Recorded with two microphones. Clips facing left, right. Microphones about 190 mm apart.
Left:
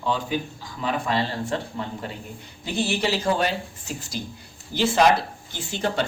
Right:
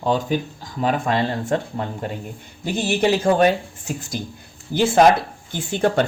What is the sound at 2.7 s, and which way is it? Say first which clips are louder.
Speech: right 5 dB; 50° right (ahead or behind).